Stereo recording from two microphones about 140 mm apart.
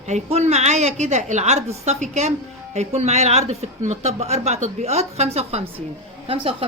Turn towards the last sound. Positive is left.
turn(degrees=-40)  # may be behind; listen again after turning